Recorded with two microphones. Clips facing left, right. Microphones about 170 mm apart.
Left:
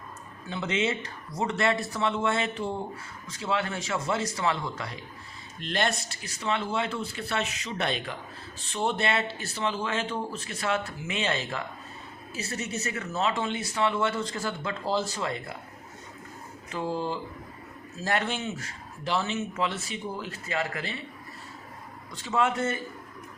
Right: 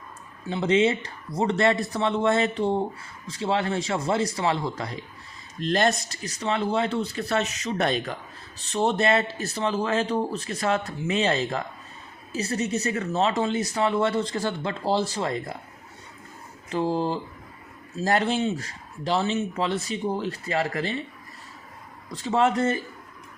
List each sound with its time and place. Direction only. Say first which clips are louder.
0.5 s speech: right 7 dB; 35° right (ahead or behind)
16.7 s speech: right 5 dB; 35° right (ahead or behind)
22.1 s speech: right 5 dB; 35° right (ahead or behind)